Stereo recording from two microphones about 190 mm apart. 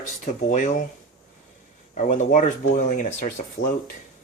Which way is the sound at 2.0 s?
40° left (ahead or behind).